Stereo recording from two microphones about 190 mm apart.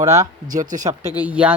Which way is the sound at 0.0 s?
15° right (ahead or behind).